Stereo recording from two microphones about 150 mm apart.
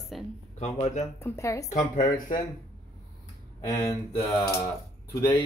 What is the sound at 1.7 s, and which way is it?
Speech, 60° left (ahead or behind).